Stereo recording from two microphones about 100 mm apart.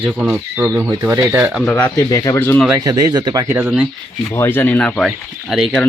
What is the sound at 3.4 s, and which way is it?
Speech, 25° right (ahead or behind).